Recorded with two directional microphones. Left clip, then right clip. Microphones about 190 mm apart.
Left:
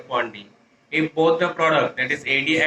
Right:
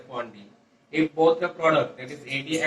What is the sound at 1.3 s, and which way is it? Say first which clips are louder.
Speech: left 6 dB; 30° left (ahead or behind).